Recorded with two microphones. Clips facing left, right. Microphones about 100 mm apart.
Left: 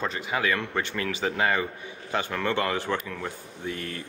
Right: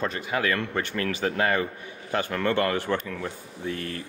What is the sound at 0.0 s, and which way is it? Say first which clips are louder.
Speech: right 1 dB; 20° left (ahead or behind).